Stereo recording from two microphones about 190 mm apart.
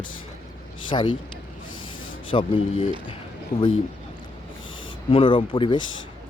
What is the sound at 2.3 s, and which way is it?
Speech, 30° left (ahead or behind).